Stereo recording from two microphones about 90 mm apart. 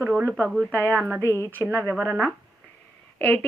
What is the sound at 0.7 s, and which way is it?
Speech, 15° left (ahead or behind).